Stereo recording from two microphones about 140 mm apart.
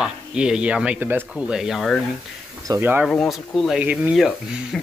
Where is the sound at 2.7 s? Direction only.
25° right (ahead or behind).